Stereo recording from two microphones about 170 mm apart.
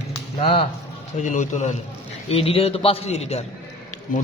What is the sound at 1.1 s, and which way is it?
A man's voice, 45° left (ahead or behind).